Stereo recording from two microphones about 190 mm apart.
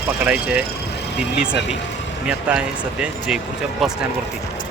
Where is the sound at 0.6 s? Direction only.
60° left (ahead or behind).